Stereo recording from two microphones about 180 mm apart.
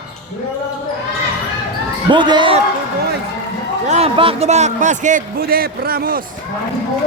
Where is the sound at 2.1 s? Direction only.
25° right (ahead or behind).